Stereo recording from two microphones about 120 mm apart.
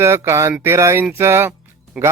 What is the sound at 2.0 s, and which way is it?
Speech, 10° right (ahead or behind).